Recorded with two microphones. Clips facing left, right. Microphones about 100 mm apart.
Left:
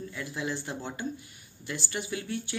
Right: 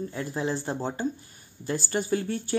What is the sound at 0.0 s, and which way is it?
Speech, 35° right (ahead or behind).